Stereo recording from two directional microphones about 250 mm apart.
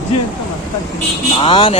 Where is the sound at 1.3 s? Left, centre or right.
Centre.